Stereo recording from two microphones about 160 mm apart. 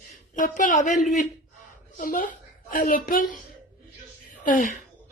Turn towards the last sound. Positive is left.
turn(degrees=55)  # may be behind; listen again after turning